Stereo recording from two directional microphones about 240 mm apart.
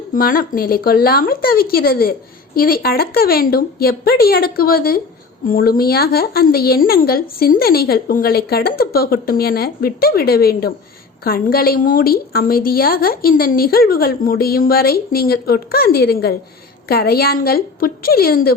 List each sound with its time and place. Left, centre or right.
0.1 s speech: left